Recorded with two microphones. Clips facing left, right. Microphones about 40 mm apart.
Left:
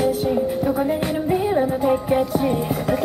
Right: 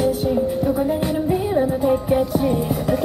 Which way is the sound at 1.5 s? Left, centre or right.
Left.